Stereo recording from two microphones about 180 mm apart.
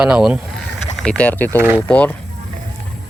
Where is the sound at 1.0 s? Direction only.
5° left (ahead or behind).